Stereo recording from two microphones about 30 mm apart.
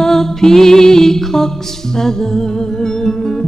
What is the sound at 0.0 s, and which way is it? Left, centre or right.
Music, centre.